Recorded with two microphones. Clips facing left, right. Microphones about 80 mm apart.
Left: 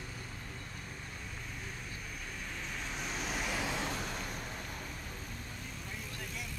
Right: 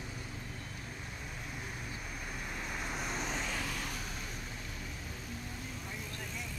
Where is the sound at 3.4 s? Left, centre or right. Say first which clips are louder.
Left 3 dB; centre.